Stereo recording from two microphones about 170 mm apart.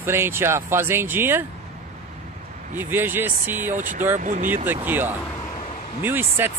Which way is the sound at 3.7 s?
50° right (ahead or behind).